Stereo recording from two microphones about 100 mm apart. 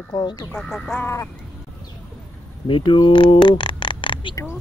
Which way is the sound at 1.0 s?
30° left (ahead or behind).